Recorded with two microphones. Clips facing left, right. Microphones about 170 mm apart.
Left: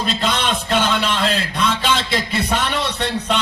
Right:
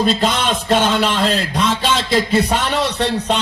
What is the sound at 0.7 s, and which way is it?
Speech, 40° right (ahead or behind).